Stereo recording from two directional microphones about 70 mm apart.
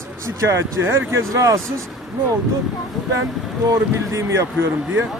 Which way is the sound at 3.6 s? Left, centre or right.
Right.